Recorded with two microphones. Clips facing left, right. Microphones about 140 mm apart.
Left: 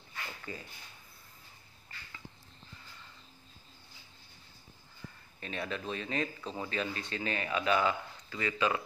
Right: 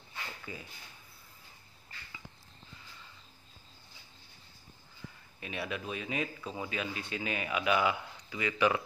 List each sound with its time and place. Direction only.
0.5 s speech: 10° right (ahead or behind)
5.4 s speech: 10° right (ahead or behind)